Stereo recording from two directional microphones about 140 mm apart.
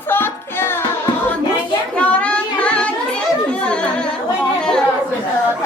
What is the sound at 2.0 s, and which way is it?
Child singing, 10° left (ahead or behind).